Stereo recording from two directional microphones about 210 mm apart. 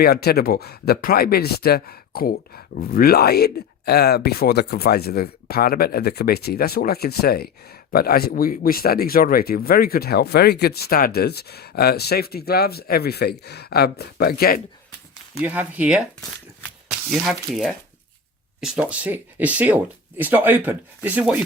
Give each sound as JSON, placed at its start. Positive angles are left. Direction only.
{"t": 0.0, "sound": "speech", "side_deg": 50}
{"t": 15.4, "sound": "speech", "side_deg": -5}
{"t": 17.1, "sound": "speech", "side_deg": 0}